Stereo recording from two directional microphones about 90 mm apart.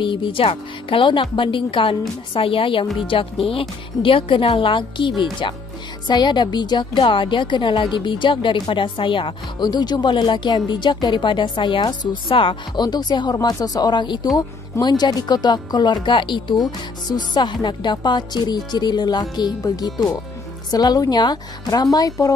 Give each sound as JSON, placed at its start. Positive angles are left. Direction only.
{"t": 0.0, "sound": "speech", "side_deg": 70}
{"t": 4.6, "sound": "a woman's voice", "side_deg": 70}
{"t": 6.0, "sound": "a woman's voice", "side_deg": 55}
{"t": 12.7, "sound": "speech", "side_deg": 50}
{"t": 16.5, "sound": "speech", "side_deg": 50}